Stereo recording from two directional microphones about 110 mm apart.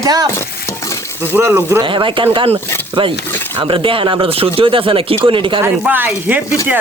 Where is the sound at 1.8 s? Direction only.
50° right (ahead or behind).